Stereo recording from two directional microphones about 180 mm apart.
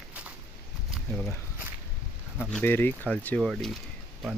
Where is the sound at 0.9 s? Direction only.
Centre (ahead or behind).